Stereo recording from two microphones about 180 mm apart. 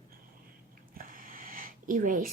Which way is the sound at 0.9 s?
50° right (ahead or behind).